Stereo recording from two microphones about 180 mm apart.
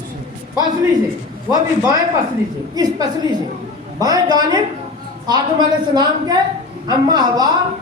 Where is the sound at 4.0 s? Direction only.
20° right (ahead or behind).